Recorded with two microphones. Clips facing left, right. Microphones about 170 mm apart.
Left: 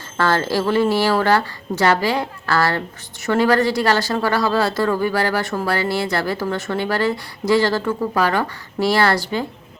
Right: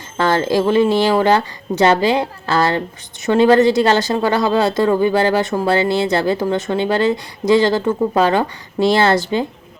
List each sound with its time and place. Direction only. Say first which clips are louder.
0.2 s speech: right 3 dB; 20° right (ahead or behind)